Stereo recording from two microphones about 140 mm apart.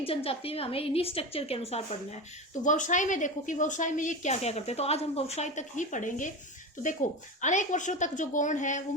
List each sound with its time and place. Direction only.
0.0 s a woman's voice: 45° left (ahead or behind)
2.6 s a woman's voice: 60° left (ahead or behind)
7.4 s a woman's voice: 60° left (ahead or behind)